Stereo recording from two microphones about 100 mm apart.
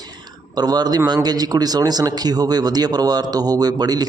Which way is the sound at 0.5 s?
45° right (ahead or behind).